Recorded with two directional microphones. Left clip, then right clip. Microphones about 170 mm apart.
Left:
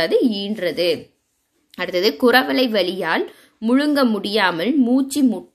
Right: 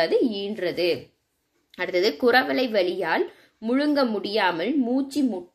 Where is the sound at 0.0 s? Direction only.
30° left (ahead or behind).